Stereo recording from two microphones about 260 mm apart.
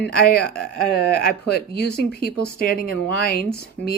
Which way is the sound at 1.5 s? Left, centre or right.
Left.